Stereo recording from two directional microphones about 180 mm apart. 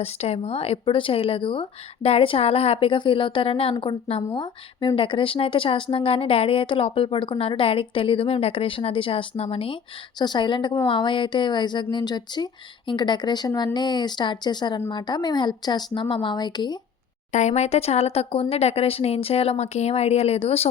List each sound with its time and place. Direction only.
0.0 s speech: 35° left (ahead or behind)
17.3 s speech: 40° left (ahead or behind)